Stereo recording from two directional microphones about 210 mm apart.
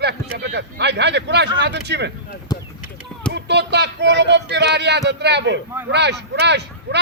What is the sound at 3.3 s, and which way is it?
Speech, 55° right (ahead or behind).